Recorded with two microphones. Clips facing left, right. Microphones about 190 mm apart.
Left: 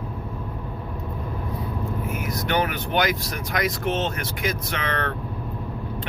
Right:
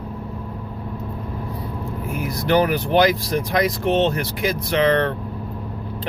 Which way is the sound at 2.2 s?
35° right (ahead or behind).